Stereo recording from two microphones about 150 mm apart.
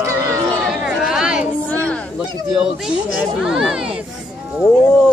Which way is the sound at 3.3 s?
5° right (ahead or behind).